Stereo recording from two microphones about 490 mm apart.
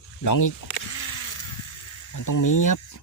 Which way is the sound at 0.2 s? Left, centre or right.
Left.